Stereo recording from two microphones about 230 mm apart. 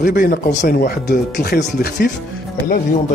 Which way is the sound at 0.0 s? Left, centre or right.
Left.